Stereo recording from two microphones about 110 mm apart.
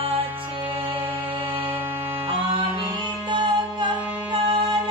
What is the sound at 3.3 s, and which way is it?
Music, 45° right (ahead or behind).